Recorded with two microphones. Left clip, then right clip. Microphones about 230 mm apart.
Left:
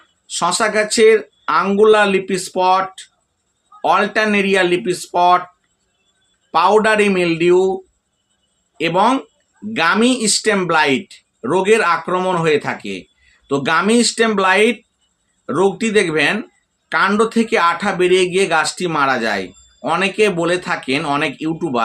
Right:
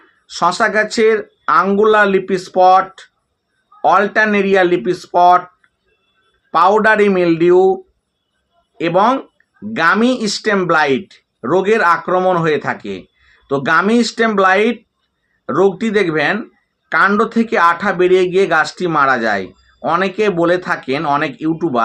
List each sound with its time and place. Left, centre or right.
0.3 s speech: centre
6.5 s a man's voice: centre
8.8 s speech: centre